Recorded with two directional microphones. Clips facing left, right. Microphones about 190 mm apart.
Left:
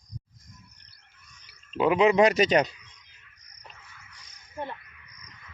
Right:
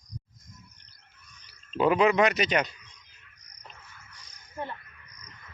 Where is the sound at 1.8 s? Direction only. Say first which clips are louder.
Left 1 dB; 15° left (ahead or behind).